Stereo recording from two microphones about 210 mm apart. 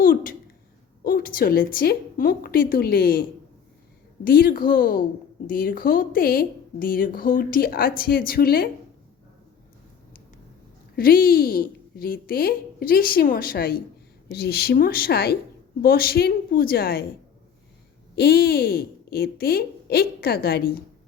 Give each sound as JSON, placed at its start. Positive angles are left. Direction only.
{"t": 0.0, "sound": "a woman's voice", "side_deg": 40}
{"t": 10.9, "sound": "a woman's voice", "side_deg": 45}
{"t": 18.2, "sound": "a woman's voice", "side_deg": 50}